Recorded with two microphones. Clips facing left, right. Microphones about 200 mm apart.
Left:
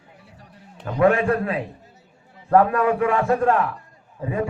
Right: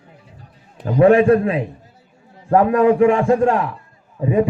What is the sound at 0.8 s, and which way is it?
A man's voice, 30° right (ahead or behind).